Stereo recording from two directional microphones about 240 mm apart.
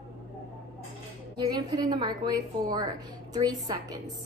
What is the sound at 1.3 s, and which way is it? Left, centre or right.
A woman's voice, centre.